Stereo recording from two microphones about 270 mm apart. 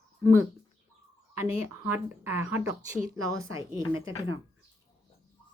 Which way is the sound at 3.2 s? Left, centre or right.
Right.